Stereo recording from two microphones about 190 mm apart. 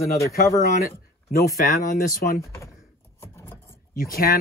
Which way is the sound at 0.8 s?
50° left (ahead or behind).